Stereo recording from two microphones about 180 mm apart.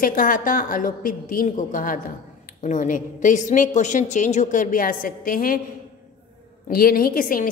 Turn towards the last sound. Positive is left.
turn(degrees=50)  # may be behind; listen again after turning